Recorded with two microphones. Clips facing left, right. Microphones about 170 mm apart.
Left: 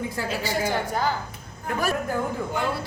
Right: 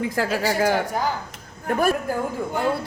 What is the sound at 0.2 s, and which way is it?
Speech, 70° right (ahead or behind).